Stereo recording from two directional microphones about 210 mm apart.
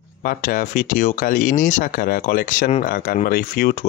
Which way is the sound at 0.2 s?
45° left (ahead or behind).